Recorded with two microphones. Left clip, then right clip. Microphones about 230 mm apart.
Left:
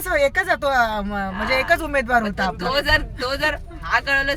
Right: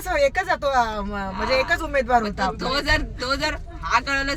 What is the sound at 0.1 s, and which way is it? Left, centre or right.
Speech, centre.